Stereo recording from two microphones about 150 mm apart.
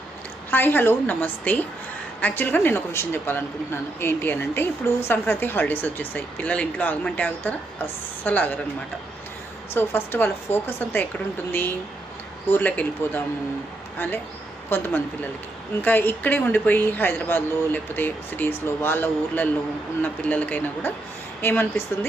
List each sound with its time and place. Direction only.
0.5 s a woman's voice: 15° left (ahead or behind)
9.7 s a woman's voice: 15° left (ahead or behind)
12.5 s a woman's voice: 10° left (ahead or behind)
14.7 s a woman's voice: 15° left (ahead or behind)